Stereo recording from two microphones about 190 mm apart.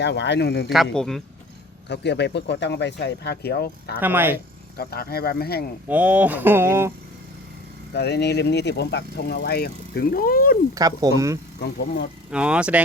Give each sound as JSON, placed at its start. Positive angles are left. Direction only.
{"t": 0.0, "sound": "speech", "side_deg": 65}
{"t": 0.7, "sound": "speech", "side_deg": 0}
{"t": 1.9, "sound": "speech", "side_deg": 65}
{"t": 4.0, "sound": "speech", "side_deg": -10}
{"t": 4.8, "sound": "speech", "side_deg": 55}
{"t": 5.9, "sound": "speech", "side_deg": -10}
{"t": 7.9, "sound": "speech", "side_deg": 60}
{"t": 10.8, "sound": "speech", "side_deg": -20}
{"t": 12.3, "sound": "speech", "side_deg": -5}